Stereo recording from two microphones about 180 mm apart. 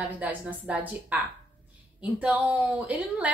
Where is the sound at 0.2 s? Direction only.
10° right (ahead or behind).